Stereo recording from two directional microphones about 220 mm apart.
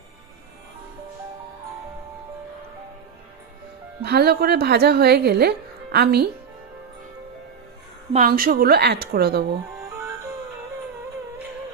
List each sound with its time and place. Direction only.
4.0 s speech: 45° right (ahead or behind)
8.1 s speech: 40° right (ahead or behind)